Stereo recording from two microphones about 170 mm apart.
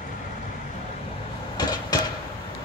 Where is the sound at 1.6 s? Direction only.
25° left (ahead or behind).